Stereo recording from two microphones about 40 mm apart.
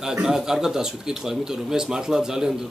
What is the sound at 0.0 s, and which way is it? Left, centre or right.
Speech, centre.